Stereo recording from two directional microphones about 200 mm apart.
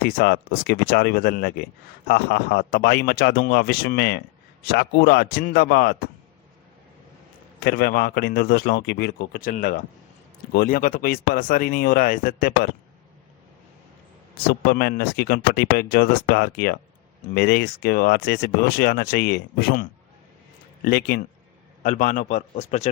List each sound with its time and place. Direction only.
0.0 s speech: 50° left (ahead or behind)
7.6 s speech: 50° left (ahead or behind)
14.4 s a man's voice: 50° left (ahead or behind); by 22.9 s 30° left (ahead or behind)